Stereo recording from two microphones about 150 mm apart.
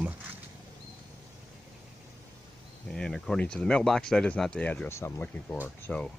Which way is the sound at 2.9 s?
5° left (ahead or behind).